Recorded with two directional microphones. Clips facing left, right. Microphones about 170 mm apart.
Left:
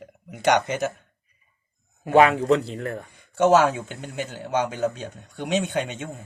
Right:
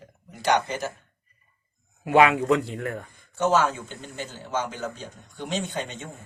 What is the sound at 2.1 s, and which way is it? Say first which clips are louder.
Speech: left 2 dB; 40° left (ahead or behind).